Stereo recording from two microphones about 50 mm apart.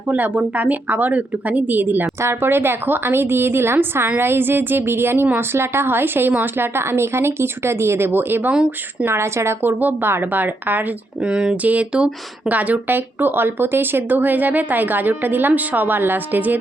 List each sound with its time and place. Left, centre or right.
0.1 s speech: right
2.2 s a woman's voice: right
9.0 s a woman's voice: right
9.6 s a woman's voice: right
11.2 s speech: centre
11.5 s speech: right
12.9 s speech: right